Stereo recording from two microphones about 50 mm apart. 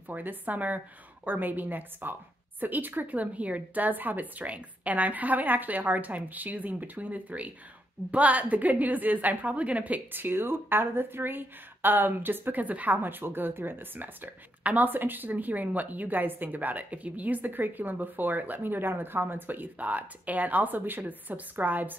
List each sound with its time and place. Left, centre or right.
0.1 s speech: right
10.1 s speech: right